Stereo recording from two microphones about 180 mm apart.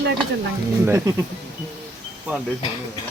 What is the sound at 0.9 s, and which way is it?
Speech, 15° right (ahead or behind).